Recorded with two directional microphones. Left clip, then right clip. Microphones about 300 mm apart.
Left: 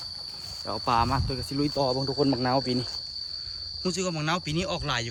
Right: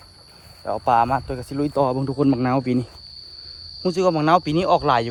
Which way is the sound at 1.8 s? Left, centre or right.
Right.